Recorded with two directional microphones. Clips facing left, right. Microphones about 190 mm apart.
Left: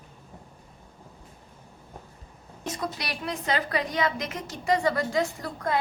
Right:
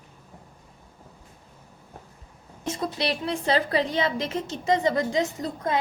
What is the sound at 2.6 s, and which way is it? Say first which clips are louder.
A woman's voice: right 5 dB; 25° right (ahead or behind).